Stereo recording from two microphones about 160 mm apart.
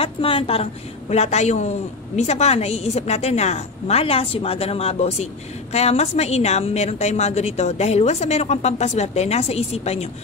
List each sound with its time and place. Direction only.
0.0 s a woman's voice: 35° left (ahead or behind)